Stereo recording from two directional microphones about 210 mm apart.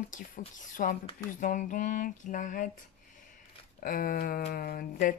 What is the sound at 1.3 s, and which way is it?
A woman's voice, 40° left (ahead or behind).